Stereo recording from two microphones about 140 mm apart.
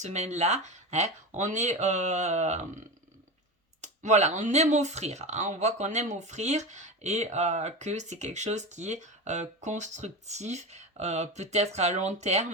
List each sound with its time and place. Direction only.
0.0 s speech: 55° right (ahead or behind)
3.8 s speech: 55° right (ahead or behind)